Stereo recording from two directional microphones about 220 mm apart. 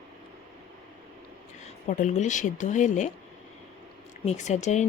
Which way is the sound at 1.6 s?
35° left (ahead or behind).